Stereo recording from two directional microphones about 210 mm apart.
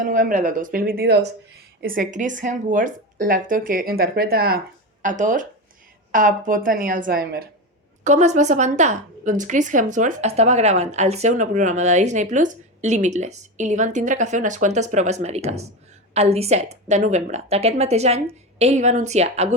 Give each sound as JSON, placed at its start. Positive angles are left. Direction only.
{"t": 0.0, "sound": "speech", "side_deg": -40}
{"t": 8.0, "sound": "speech", "side_deg": -35}